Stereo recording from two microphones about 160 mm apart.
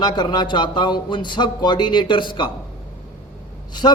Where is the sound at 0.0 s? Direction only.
25° left (ahead or behind).